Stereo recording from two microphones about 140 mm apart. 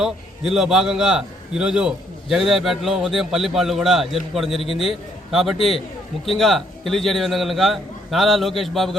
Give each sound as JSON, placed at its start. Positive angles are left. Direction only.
{"t": 0.0, "sound": "a man's voice", "side_deg": -5}
{"t": 4.6, "sound": "a man's voice", "side_deg": 45}
{"t": 4.9, "sound": "a man's voice", "side_deg": 0}